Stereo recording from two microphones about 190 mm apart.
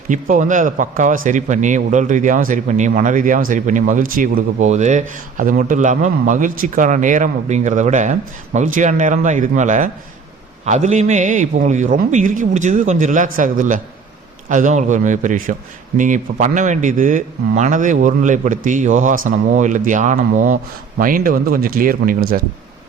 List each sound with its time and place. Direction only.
0.1 s a man's voice: 40° right (ahead or behind)